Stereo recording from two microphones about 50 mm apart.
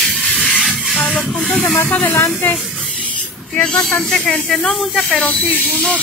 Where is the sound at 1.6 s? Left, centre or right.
Left.